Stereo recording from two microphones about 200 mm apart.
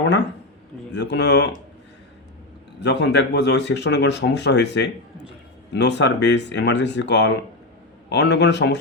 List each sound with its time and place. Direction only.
0.0 s speech: 60° left (ahead or behind)
2.8 s speech: 60° left (ahead or behind)